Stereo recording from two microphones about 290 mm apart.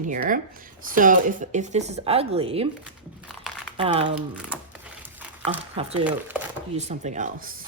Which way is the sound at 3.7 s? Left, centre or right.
Centre.